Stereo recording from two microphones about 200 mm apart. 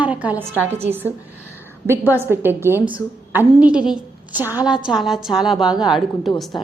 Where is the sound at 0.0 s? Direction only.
5° right (ahead or behind).